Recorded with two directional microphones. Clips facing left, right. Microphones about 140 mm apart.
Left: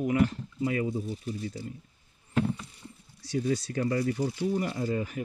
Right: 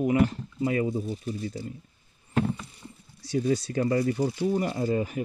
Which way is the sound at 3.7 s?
30° right (ahead or behind).